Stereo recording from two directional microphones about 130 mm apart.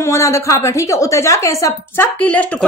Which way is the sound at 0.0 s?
20° left (ahead or behind).